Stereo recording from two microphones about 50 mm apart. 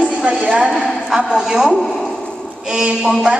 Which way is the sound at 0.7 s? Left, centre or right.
Centre.